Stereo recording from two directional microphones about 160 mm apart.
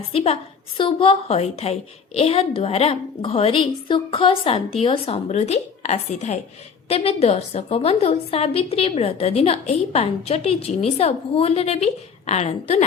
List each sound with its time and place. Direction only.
0.1 s a woman's voice: 35° left (ahead or behind)